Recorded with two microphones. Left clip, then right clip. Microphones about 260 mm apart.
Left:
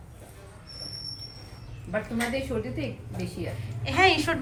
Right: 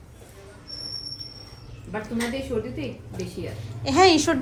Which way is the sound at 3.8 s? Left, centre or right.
Right.